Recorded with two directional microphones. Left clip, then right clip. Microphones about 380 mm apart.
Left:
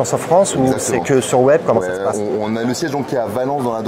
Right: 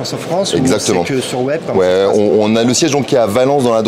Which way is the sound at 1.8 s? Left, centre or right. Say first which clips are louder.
Right 8 dB; right.